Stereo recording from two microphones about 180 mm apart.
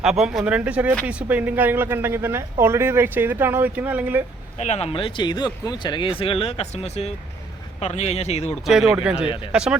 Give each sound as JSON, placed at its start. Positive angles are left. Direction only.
{"t": 0.0, "sound": "speech", "side_deg": 0}
{"t": 4.5, "sound": "speech", "side_deg": 40}
{"t": 8.6, "sound": "speech", "side_deg": 0}
{"t": 9.1, "sound": "speech", "side_deg": 30}
{"t": 9.5, "sound": "speech", "side_deg": -5}